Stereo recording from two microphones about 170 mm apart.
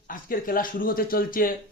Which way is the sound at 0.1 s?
55° left (ahead or behind).